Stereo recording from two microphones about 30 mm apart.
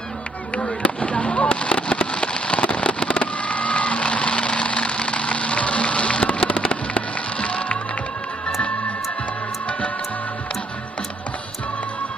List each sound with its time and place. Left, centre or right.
0.6 s fireworks: left